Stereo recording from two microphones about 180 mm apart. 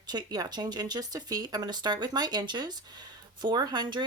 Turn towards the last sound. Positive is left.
turn(degrees=-25)  # may be behind; listen again after turning